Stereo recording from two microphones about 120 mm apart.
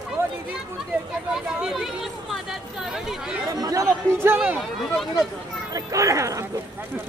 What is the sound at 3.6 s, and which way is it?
Speech, 30° right (ahead or behind).